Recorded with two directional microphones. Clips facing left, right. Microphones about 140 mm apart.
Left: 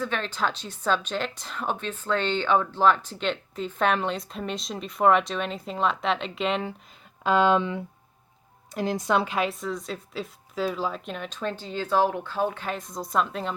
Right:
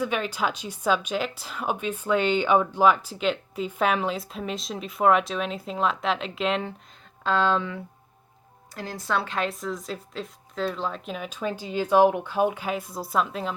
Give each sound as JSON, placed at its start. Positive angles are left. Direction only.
{"t": 0.0, "sound": "speech", "side_deg": -10}
{"t": 7.3, "sound": "speech", "side_deg": 15}